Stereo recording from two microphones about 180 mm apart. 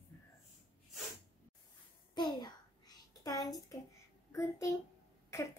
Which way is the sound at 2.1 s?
25° left (ahead or behind).